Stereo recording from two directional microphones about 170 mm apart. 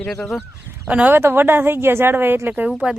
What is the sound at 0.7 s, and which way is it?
Speech, 10° right (ahead or behind).